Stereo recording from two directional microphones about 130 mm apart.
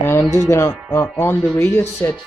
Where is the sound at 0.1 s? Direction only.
20° left (ahead or behind).